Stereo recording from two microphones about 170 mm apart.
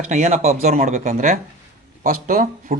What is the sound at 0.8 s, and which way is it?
Speech, 50° right (ahead or behind).